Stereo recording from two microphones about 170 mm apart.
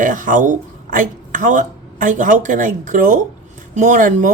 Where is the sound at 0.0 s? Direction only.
50° right (ahead or behind).